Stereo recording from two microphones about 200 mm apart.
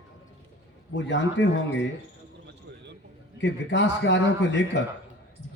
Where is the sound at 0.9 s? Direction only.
65° left (ahead or behind).